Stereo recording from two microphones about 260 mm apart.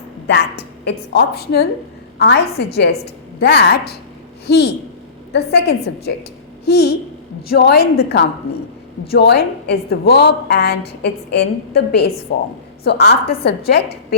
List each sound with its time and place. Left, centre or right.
0.3 s a woman's voice: left
3.4 s a woman's voice: left